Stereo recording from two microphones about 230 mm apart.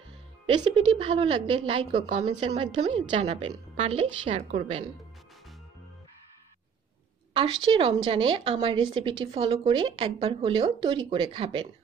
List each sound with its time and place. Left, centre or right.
0.6 s a woman's voice: right
7.6 s a woman's voice: right